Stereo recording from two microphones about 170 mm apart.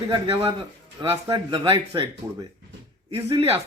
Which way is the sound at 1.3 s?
30° right (ahead or behind).